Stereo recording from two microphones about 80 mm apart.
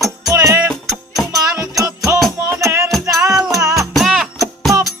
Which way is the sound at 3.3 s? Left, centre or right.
Centre.